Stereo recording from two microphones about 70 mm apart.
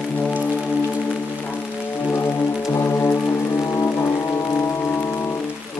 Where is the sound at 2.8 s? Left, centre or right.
Left.